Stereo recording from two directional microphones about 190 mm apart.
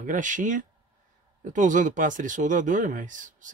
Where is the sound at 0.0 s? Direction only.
40° right (ahead or behind).